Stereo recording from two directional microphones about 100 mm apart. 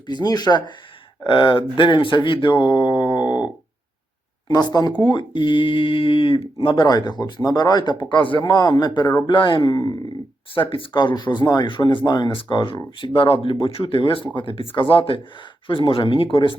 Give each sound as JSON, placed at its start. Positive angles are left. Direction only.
{"t": 0.1, "sound": "speech", "side_deg": 40}
{"t": 1.3, "sound": "speech", "side_deg": 55}
{"t": 4.4, "sound": "speech", "side_deg": 45}
{"t": 6.8, "sound": "speech", "side_deg": 45}
{"t": 9.2, "sound": "speech", "side_deg": 55}
{"t": 10.5, "sound": "speech", "side_deg": 60}